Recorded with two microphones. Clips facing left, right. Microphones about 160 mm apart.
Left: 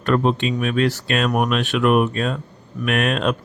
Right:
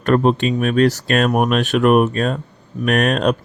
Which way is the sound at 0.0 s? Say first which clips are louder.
Right 4 dB; 45° right (ahead or behind).